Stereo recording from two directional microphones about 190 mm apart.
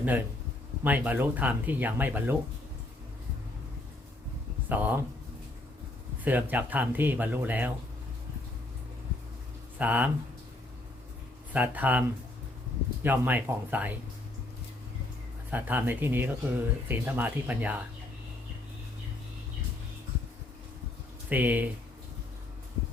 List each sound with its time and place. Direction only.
0.9 s speech: 10° right (ahead or behind)
4.7 s speech: 10° right (ahead or behind)
6.2 s speech: 10° right (ahead or behind)
9.7 s speech: 10° right (ahead or behind)
11.5 s speech: 10° right (ahead or behind)
15.4 s speech: 10° right (ahead or behind)
21.2 s speech: 10° right (ahead or behind)